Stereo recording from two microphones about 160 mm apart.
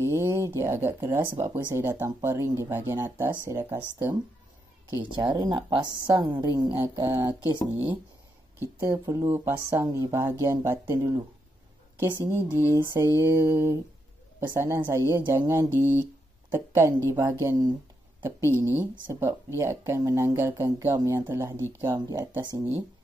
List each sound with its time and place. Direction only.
0.0 s speech: 15° right (ahead or behind)
4.9 s a woman's voice: 30° right (ahead or behind)
6.5 s speech: 15° right (ahead or behind)
8.7 s speech: 20° right (ahead or behind)